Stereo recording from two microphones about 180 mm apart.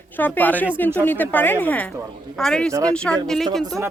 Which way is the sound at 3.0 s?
5° left (ahead or behind).